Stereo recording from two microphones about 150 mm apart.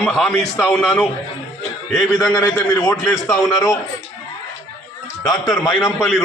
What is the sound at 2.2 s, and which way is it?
Speech, 25° left (ahead or behind).